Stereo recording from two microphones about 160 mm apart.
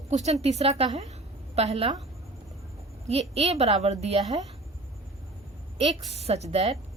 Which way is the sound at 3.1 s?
40° right (ahead or behind).